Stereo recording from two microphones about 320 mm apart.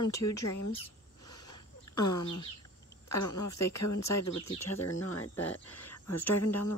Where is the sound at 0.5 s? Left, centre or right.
Left.